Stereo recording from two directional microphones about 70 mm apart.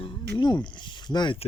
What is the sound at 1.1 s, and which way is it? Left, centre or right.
Speech, left.